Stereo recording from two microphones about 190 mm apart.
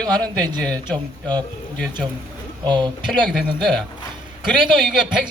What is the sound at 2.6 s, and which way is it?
Speech, 25° right (ahead or behind).